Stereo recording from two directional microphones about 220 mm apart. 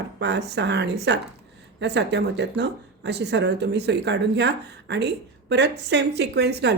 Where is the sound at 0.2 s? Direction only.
50° right (ahead or behind).